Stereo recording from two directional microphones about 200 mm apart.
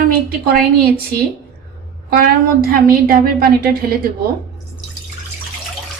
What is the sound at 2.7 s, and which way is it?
A woman's voice, 45° right (ahead or behind).